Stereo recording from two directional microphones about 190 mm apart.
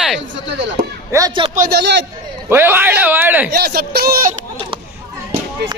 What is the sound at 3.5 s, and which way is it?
Speech, 55° right (ahead or behind).